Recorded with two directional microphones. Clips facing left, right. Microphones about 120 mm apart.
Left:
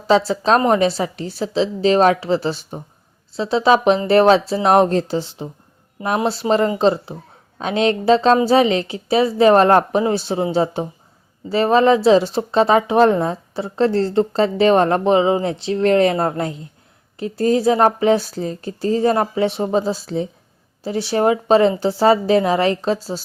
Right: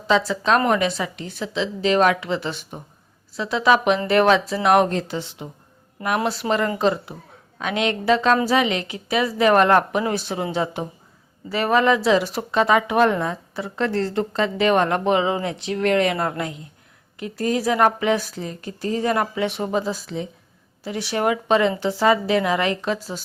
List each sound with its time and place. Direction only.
0.1 s a woman's voice: 30° left (ahead or behind)